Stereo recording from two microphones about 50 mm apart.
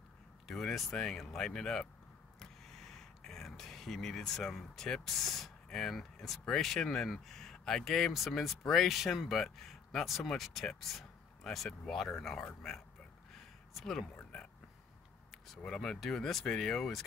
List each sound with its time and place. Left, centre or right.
0.5 s speech: centre
15.3 s a sound: centre
15.7 s speech: centre